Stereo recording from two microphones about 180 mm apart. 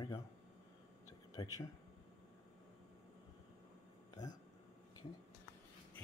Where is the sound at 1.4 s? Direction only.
20° left (ahead or behind).